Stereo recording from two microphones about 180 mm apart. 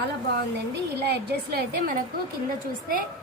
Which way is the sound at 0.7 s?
65° right (ahead or behind).